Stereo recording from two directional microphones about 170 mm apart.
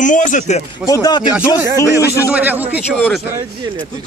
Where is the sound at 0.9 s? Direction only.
25° left (ahead or behind).